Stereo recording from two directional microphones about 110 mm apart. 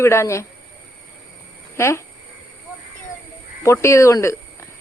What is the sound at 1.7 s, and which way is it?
Speech, 25° left (ahead or behind).